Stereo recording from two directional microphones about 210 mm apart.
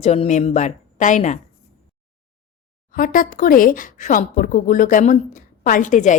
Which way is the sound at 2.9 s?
40° left (ahead or behind).